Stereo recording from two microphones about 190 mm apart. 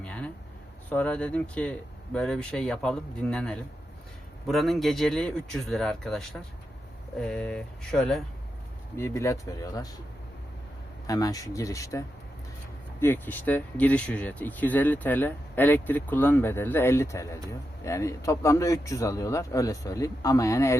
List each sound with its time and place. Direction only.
0.9 s speech: 5° left (ahead or behind)
9.0 s speech: 15° left (ahead or behind)
11.0 s speech: 20° left (ahead or behind)